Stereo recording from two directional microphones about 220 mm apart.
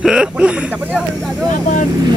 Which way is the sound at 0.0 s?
5° right (ahead or behind).